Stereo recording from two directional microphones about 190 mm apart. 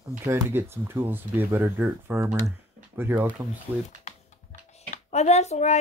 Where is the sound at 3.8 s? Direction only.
40° left (ahead or behind).